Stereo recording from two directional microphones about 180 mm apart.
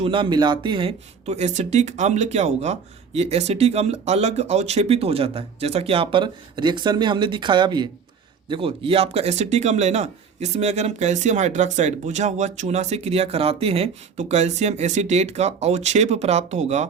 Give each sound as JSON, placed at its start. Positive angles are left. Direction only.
{"t": 0.0, "sound": "speech", "side_deg": -30}